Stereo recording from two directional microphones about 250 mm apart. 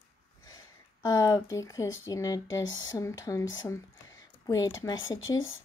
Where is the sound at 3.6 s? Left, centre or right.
Centre.